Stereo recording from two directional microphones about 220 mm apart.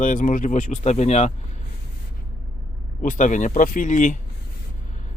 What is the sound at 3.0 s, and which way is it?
Speech, 35° left (ahead or behind).